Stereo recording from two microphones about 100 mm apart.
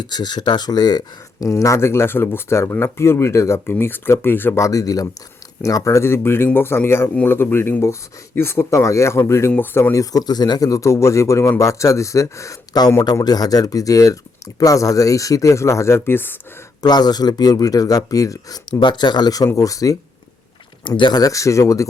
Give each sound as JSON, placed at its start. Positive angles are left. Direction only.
{"t": 0.0, "sound": "speech", "side_deg": 45}
{"t": 9.9, "sound": "speech", "side_deg": 35}
{"t": 16.8, "sound": "speech", "side_deg": 45}
{"t": 18.8, "sound": "speech", "side_deg": 50}
{"t": 20.8, "sound": "speech", "side_deg": 50}